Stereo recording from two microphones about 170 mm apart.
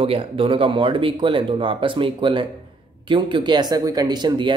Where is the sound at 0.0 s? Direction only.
30° right (ahead or behind).